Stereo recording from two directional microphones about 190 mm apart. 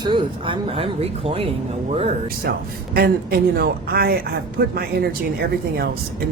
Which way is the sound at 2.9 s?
55° right (ahead or behind).